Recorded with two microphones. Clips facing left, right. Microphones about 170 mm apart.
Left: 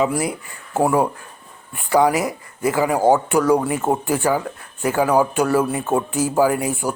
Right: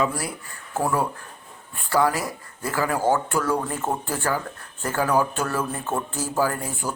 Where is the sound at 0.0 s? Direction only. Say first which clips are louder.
Left 5 dB; 20° left (ahead or behind).